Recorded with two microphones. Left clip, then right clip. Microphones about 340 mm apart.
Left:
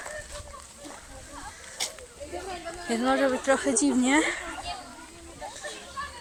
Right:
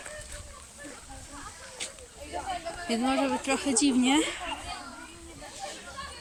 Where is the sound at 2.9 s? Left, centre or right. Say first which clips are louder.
Left 3 dB; centre.